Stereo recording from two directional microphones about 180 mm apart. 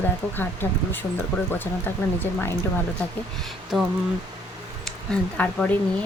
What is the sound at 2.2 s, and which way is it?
Speech, 10° left (ahead or behind).